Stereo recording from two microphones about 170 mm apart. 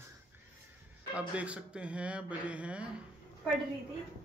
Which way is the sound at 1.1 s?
5° right (ahead or behind).